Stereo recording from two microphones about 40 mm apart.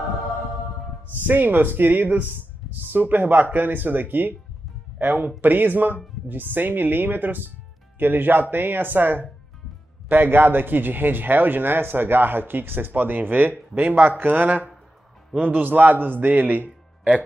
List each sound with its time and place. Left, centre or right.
1.2 s a man's voice: right